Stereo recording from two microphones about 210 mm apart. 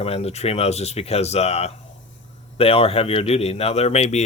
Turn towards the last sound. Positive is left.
turn(degrees=30)  # may be behind; listen again after turning